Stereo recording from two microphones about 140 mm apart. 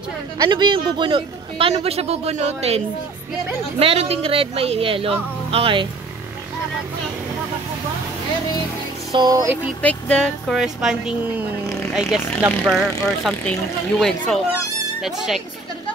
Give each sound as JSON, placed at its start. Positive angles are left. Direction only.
{"t": 0.4, "sound": "a man's voice", "side_deg": -35}
{"t": 3.8, "sound": "speech", "side_deg": -45}
{"t": 9.1, "sound": "music", "side_deg": -30}
{"t": 9.8, "sound": "speech", "side_deg": 10}